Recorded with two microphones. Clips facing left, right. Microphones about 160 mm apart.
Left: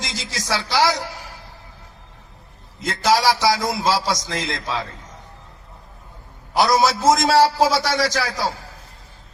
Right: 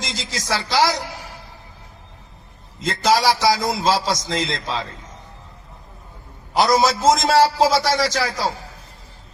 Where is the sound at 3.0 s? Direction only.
20° right (ahead or behind).